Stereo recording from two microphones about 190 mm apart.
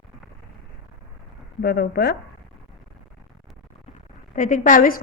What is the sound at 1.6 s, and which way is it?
Speech, 55° left (ahead or behind).